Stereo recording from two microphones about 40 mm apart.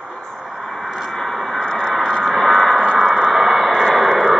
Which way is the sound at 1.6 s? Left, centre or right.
Centre.